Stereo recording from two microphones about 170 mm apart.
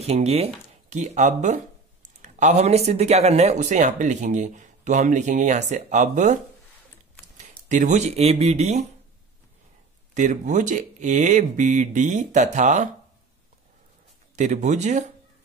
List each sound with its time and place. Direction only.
0.0 s speech: 40° right (ahead or behind)
10.1 s speech: 45° right (ahead or behind)
14.3 s speech: 45° right (ahead or behind)